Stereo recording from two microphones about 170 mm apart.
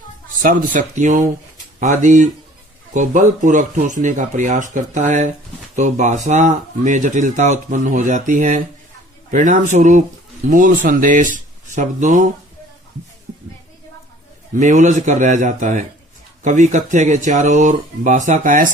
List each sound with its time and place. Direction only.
0.4 s speech: 50° right (ahead or behind)
14.5 s speech: 45° right (ahead or behind)